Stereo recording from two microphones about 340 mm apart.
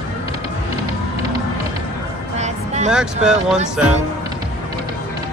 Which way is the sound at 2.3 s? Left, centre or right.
Centre.